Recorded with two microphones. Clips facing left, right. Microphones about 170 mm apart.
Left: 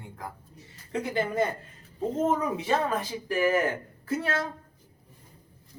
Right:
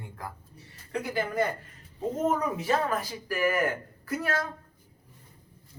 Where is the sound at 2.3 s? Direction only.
25° left (ahead or behind).